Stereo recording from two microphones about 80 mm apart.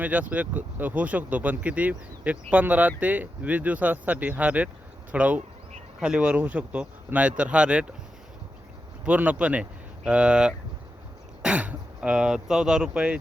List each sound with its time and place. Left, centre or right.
0.0 s speech: centre
9.0 s speech: centre